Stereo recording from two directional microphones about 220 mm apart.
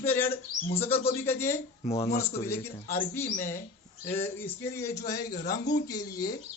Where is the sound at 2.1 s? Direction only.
10° left (ahead or behind).